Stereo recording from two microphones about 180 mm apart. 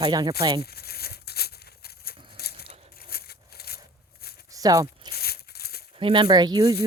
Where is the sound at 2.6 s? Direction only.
35° right (ahead or behind).